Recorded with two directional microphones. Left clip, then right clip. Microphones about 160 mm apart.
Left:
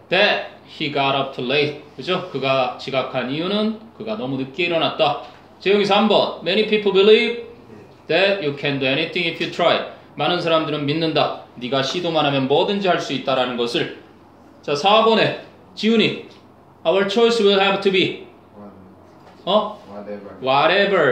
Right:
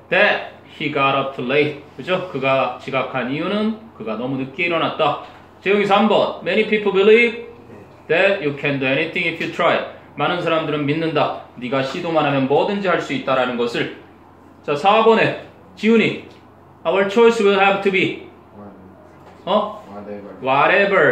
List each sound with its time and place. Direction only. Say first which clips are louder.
0.7 s speech: right 2 dB; 45° left (ahead or behind)
20.4 s speech: right 1 dB; 45° left (ahead or behind)